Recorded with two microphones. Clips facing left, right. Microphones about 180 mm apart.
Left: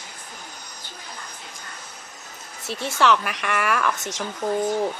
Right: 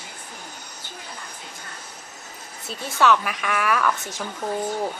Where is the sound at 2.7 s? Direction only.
75° left (ahead or behind).